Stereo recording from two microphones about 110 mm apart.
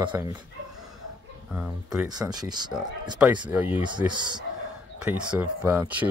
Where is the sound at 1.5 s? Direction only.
10° right (ahead or behind).